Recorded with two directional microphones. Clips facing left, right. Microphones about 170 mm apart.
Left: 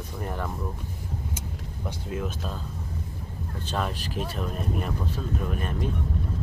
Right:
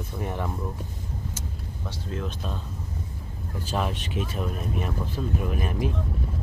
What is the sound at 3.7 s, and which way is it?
Speech, centre (ahead or behind).